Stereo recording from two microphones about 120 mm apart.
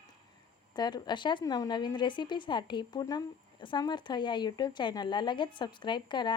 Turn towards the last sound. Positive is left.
turn(degrees=40)  # may be behind; listen again after turning